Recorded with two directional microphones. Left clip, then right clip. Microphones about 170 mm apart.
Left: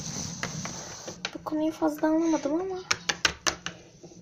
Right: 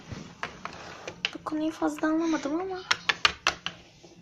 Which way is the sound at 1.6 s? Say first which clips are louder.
Left 2 dB; centre (ahead or behind).